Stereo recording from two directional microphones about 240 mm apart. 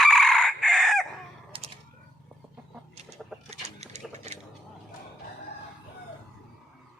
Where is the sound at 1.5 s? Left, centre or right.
Right.